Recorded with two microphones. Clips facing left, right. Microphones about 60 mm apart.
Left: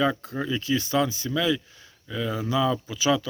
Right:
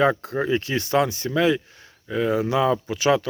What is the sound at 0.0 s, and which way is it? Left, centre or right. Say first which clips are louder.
Speech: right 5 dB; right.